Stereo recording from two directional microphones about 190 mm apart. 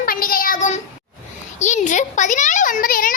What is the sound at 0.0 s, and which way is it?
Child singing, 50° left (ahead or behind).